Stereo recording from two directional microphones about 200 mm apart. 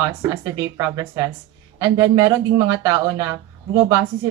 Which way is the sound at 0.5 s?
20° right (ahead or behind).